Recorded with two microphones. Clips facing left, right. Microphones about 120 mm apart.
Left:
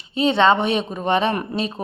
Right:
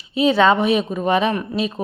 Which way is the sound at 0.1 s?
30° left (ahead or behind).